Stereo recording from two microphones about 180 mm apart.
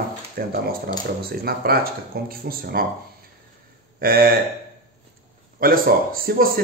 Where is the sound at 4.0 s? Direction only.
55° right (ahead or behind).